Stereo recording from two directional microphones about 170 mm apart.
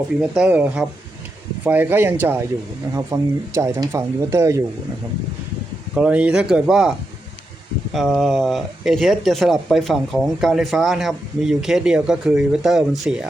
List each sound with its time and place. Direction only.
0.2 s speech: 5° right (ahead or behind)
5.9 s speech: 5° right (ahead or behind)
7.9 s speech: centre (ahead or behind)